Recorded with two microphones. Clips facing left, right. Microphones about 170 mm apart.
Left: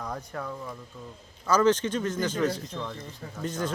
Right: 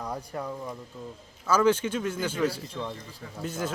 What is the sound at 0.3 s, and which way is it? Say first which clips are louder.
Speech: right 1 dB; 15° right (ahead or behind).